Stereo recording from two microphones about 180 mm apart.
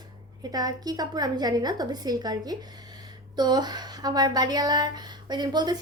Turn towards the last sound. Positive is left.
turn(degrees=-25)  # may be behind; listen again after turning